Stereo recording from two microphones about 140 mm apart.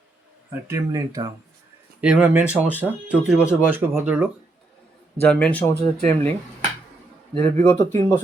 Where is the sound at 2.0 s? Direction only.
10° right (ahead or behind).